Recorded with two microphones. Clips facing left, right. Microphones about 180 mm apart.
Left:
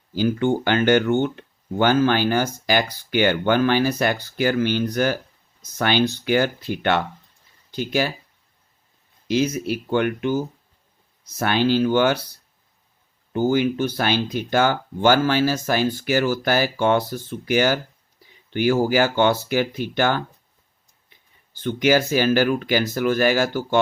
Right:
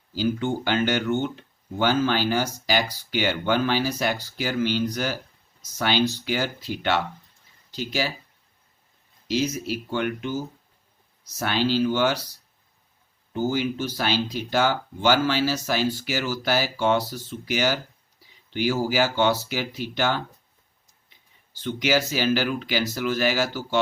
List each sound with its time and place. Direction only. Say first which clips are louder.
0.1 s speech: left 5 dB; 55° left (ahead or behind)
9.2 s speech: left 4 dB; 55° left (ahead or behind)
13.3 s speech: left 5 dB; 55° left (ahead or behind)